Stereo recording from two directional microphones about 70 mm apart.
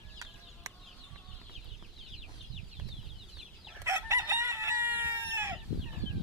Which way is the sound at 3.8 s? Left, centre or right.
Right.